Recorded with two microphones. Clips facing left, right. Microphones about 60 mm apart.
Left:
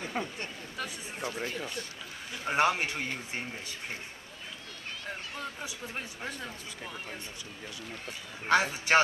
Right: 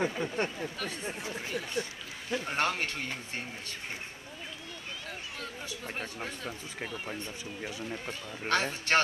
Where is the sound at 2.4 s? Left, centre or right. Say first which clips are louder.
Left 6 dB; centre.